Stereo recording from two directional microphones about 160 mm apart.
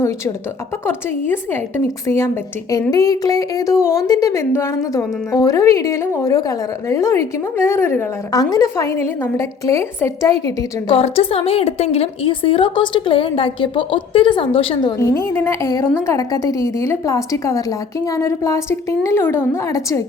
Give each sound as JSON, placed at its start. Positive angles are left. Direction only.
{"t": 0.9, "sound": "a woman's voice", "side_deg": 15}
{"t": 10.9, "sound": "a woman's voice", "side_deg": 40}